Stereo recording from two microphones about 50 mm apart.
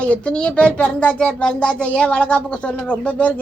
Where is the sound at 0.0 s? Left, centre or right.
Left.